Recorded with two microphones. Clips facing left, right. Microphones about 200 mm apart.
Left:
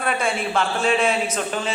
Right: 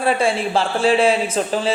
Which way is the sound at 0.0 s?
30° right (ahead or behind).